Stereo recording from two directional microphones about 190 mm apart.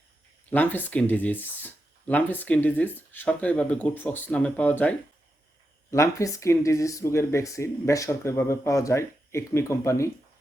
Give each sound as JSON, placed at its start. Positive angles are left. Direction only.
{"t": 0.5, "sound": "speech", "side_deg": 10}